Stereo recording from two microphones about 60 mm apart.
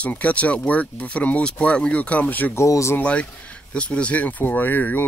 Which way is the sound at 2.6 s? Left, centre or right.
Left.